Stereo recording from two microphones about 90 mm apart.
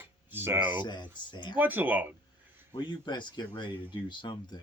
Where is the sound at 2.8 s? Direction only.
55° left (ahead or behind).